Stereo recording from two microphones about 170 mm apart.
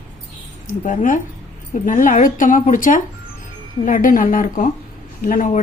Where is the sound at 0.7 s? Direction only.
50° left (ahead or behind).